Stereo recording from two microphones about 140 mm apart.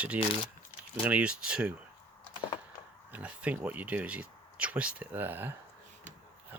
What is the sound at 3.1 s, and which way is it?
Speech, 10° right (ahead or behind).